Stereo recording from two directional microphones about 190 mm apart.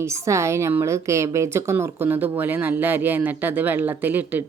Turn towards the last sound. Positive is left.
turn(degrees=-10)  # may be behind; listen again after turning